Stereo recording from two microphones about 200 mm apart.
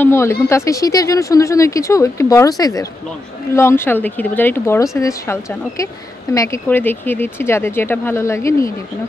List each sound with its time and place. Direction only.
0.0 s speech: 15° left (ahead or behind)